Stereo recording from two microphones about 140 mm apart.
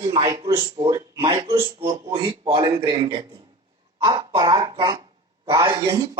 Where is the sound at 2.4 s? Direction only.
40° right (ahead or behind).